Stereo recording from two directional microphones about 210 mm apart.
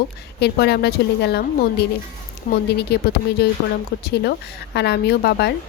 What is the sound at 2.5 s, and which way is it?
A woman's voice, 50° left (ahead or behind).